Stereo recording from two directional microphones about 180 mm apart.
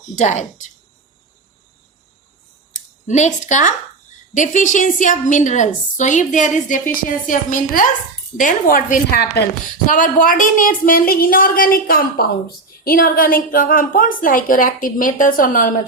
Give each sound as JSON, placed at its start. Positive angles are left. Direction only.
{"t": 0.2, "sound": "a woman's voice", "side_deg": 40}
{"t": 3.1, "sound": "a woman's voice", "side_deg": 40}
{"t": 9.8, "sound": "a woman's voice", "side_deg": 50}